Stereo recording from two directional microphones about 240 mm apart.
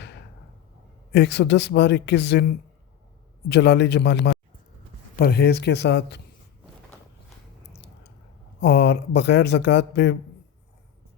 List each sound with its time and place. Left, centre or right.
1.1 s speech: left
8.6 s speech: left